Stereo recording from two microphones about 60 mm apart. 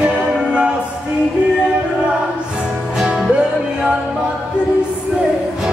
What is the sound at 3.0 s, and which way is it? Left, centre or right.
Music, centre.